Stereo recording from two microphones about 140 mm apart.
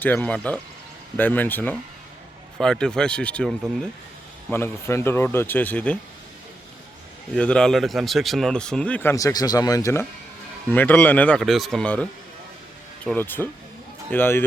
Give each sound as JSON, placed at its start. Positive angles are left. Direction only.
{"t": 0.0, "sound": "speech", "side_deg": 10}
{"t": 4.5, "sound": "speech", "side_deg": 15}
{"t": 7.3, "sound": "speech", "side_deg": 5}
{"t": 13.1, "sound": "speech", "side_deg": 15}